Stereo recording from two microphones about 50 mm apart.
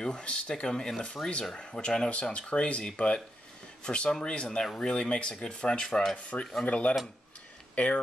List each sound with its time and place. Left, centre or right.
0.0 s speech: centre
6.6 s speech: left